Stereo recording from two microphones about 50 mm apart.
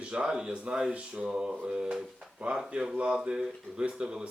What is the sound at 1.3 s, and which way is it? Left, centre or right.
Speech, centre.